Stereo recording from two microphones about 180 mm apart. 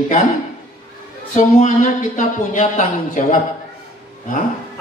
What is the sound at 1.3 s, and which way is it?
Speech, 45° left (ahead or behind).